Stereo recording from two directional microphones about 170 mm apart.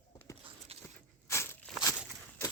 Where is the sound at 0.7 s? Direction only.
35° right (ahead or behind).